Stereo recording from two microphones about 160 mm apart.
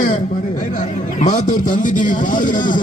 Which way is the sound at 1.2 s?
55° left (ahead or behind).